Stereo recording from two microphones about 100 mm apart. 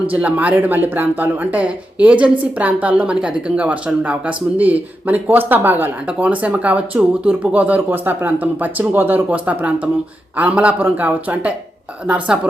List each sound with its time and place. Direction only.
0.1 s speech: 15° right (ahead or behind)